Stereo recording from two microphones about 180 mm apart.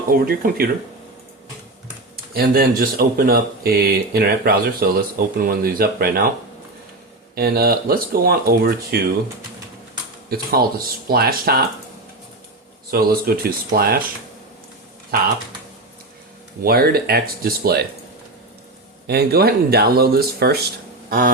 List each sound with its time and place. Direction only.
0.1 s speech: 55° right (ahead or behind)
2.3 s speech: 55° right (ahead or behind)
7.3 s speech: 60° right (ahead or behind)
10.2 s speech: 60° right (ahead or behind)
12.9 s speech: 55° right (ahead or behind)
16.6 s speech: 55° right (ahead or behind)
19.0 s speech: 60° right (ahead or behind)
21.1 s a sound: 50° right (ahead or behind)